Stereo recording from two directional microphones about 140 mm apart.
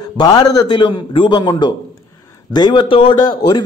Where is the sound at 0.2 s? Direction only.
30° left (ahead or behind).